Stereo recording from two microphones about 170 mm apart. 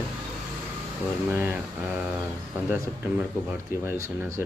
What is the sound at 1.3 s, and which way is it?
Speech, 10° right (ahead or behind).